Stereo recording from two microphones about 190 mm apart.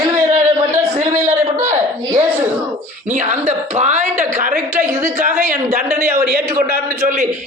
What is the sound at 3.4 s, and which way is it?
A man's voice, 35° right (ahead or behind).